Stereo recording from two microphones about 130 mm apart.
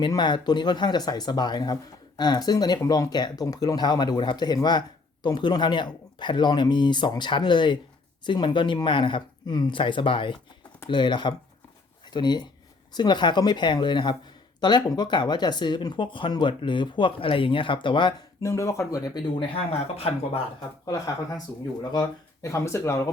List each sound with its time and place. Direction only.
0.0 s speech: 35° left (ahead or behind)
18.4 s speech: 20° left (ahead or behind)
20.0 s speech: 50° left (ahead or behind)
20.8 s speech: 30° left (ahead or behind)